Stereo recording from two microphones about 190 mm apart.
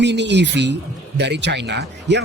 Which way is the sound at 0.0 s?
65° right (ahead or behind).